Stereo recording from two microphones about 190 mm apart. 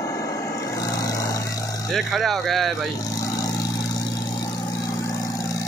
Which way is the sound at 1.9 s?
Centre (ahead or behind).